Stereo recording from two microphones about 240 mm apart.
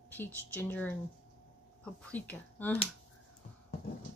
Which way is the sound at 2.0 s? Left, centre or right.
Centre.